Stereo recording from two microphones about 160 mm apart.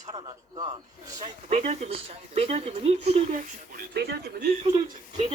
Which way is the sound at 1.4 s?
45° right (ahead or behind).